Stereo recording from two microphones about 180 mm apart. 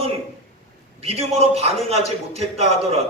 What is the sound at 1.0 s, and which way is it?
A man's voice, 35° right (ahead or behind).